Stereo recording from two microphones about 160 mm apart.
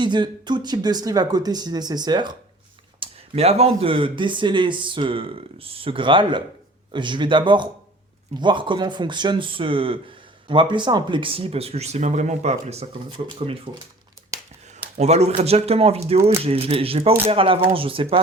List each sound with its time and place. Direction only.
0.0 s speech: 30° right (ahead or behind)
3.0 s speech: 40° right (ahead or behind)
13.1 s speech: 35° right (ahead or behind)
14.9 s speech: 45° right (ahead or behind)